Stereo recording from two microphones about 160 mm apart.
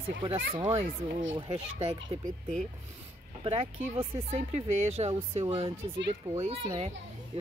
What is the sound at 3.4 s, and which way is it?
Speech, 35° right (ahead or behind).